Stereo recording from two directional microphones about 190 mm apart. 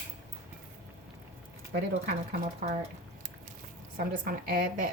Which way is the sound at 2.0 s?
40° right (ahead or behind).